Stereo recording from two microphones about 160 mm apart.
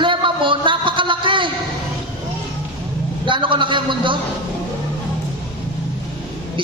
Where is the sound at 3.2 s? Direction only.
30° right (ahead or behind).